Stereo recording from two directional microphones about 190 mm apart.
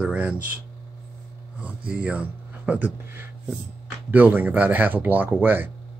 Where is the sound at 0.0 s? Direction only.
5° right (ahead or behind).